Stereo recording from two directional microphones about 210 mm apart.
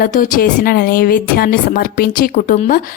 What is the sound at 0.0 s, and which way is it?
Speech, 40° left (ahead or behind).